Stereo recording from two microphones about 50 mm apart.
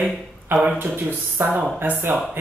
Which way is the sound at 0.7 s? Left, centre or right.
Right.